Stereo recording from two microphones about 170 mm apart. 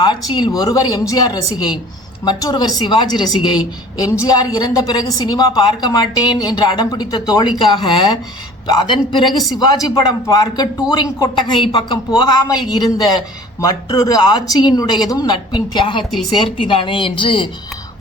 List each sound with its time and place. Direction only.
0.0 s speech: 25° left (ahead or behind)